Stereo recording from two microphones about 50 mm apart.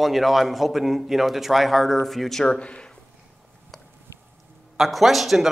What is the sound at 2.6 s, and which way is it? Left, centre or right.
Speech, left.